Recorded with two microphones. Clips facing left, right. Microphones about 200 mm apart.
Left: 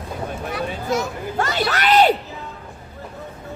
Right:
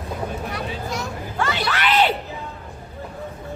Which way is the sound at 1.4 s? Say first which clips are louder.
Left 2 dB; 40° left (ahead or behind).